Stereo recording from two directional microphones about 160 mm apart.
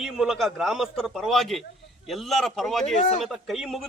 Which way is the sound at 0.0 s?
Centre (ahead or behind).